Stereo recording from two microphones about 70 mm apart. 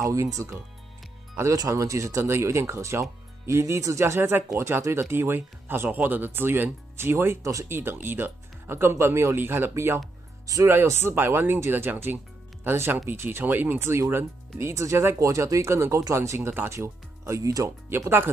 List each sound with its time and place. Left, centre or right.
0.0 s speech: right
10.4 s speech: right
10.7 s speech: right
17.6 s speech: right